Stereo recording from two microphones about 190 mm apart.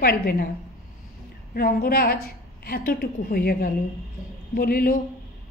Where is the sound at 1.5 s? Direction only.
50° left (ahead or behind).